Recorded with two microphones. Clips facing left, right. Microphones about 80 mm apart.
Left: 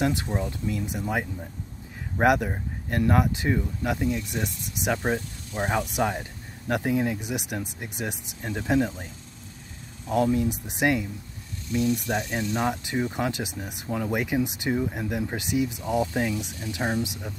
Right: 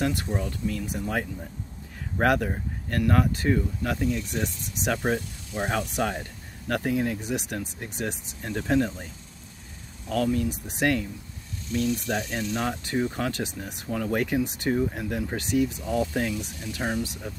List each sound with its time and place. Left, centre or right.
0.0 s speech: left
10.0 s speech: left